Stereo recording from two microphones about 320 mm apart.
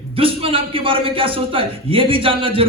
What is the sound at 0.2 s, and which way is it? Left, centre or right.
A man's voice, centre.